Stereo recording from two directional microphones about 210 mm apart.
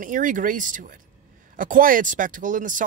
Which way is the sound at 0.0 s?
40° right (ahead or behind).